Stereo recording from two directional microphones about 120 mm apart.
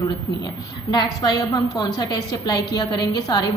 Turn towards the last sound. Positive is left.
turn(degrees=30)  # may be behind; listen again after turning